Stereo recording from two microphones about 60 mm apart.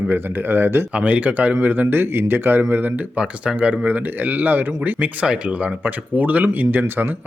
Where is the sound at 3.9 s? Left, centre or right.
Right.